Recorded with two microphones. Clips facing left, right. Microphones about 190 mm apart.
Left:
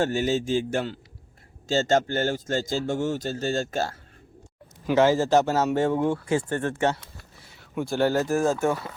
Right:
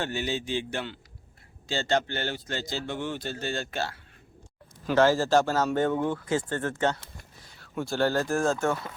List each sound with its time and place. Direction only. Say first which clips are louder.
0.0 s a man's voice: left 7 dB; 45° left (ahead or behind)
4.9 s speech: left 2 dB; 15° left (ahead or behind)